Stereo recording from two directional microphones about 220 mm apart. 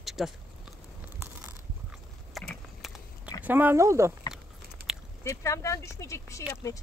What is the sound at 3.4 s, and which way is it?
Speech, 10° right (ahead or behind).